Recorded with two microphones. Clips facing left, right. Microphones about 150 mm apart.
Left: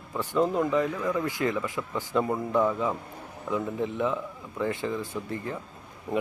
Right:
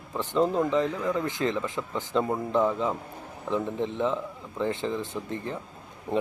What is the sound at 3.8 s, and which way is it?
Speech, 25° right (ahead or behind).